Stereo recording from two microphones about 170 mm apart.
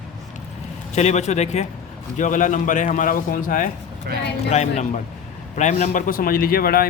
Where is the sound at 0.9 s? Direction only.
40° left (ahead or behind).